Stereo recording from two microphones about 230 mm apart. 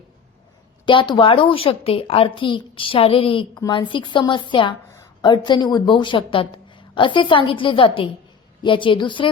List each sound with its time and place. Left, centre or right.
0.9 s speech: left